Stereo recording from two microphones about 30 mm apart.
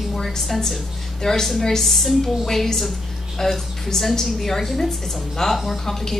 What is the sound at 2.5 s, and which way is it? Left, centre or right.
A woman's voice, centre.